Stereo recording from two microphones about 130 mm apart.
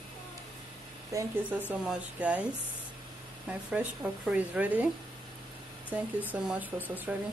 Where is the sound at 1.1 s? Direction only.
25° right (ahead or behind).